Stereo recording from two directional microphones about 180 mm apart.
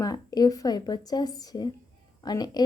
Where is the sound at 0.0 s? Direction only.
20° left (ahead or behind).